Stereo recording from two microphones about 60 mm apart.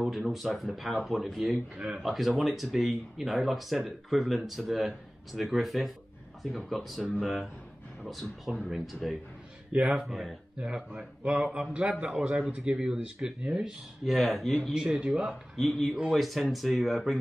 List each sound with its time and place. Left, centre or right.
0.0 s speech: centre
9.7 s a man's voice: centre
10.0 s speech: centre
10.6 s speech: centre
14.0 s speech: centre
14.7 s speech: centre
15.5 s speech: centre